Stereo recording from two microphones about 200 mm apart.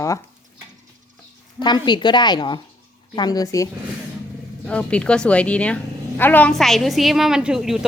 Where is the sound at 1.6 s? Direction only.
20° left (ahead or behind).